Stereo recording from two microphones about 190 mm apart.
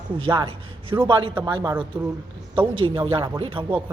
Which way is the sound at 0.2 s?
25° right (ahead or behind).